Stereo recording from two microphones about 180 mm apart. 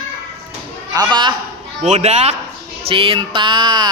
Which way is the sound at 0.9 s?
25° right (ahead or behind).